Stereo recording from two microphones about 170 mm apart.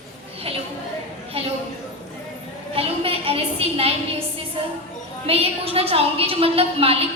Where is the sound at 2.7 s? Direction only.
35° right (ahead or behind).